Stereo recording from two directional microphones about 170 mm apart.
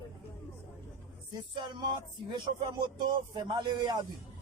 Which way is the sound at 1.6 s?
25° right (ahead or behind).